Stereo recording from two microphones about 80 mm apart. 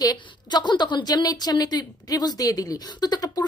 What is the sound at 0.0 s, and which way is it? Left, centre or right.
A woman's voice, left.